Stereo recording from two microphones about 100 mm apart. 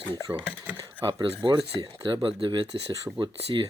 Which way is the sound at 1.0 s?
60° right (ahead or behind).